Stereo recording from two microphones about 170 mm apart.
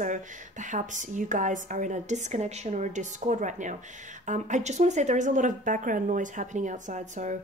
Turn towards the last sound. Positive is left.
turn(degrees=-45)  # may be behind; listen again after turning